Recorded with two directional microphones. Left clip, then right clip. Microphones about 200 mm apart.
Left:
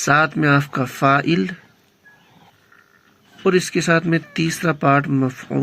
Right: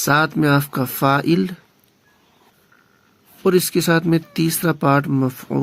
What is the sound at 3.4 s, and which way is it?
Speech, 50° right (ahead or behind).